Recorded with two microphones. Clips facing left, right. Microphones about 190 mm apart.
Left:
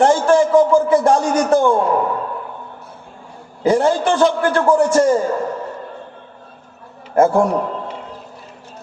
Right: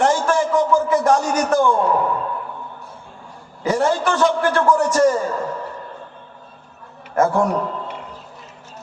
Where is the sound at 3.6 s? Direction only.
30° left (ahead or behind).